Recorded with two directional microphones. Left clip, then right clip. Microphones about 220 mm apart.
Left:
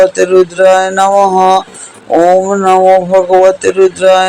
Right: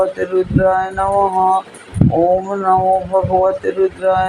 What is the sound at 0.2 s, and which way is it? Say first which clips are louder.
Speech: left 9 dB; 40° left (ahead or behind).